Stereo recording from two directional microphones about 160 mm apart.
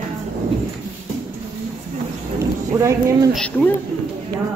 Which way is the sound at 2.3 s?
20° right (ahead or behind).